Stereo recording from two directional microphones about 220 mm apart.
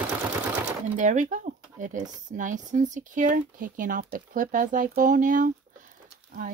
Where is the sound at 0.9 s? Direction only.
35° right (ahead or behind).